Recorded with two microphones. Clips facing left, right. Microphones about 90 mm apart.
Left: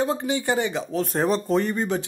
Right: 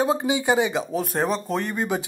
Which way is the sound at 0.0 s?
15° right (ahead or behind).